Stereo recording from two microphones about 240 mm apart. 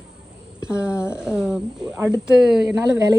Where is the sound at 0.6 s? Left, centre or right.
Centre.